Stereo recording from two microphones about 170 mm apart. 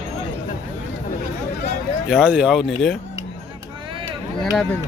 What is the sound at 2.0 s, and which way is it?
Speech, 5° right (ahead or behind).